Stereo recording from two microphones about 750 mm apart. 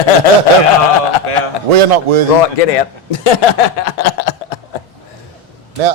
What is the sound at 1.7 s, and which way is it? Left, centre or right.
Speech, right.